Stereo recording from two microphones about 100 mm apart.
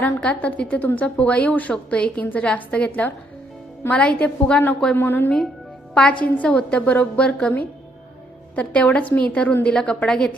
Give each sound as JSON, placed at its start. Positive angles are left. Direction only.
{"t": 0.0, "sound": "a woman's voice", "side_deg": 10}
{"t": 4.9, "sound": "a woman's voice", "side_deg": 20}
{"t": 5.9, "sound": "a woman's voice", "side_deg": 10}